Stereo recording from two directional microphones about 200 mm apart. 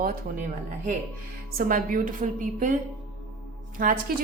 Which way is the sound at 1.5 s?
45° right (ahead or behind).